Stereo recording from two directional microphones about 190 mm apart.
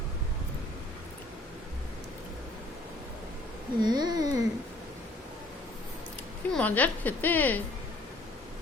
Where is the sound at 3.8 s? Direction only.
20° right (ahead or behind).